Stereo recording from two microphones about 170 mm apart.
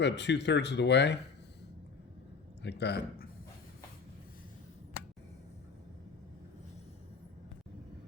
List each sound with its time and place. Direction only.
0.0 s speech: 90° left
2.6 s speech: 80° left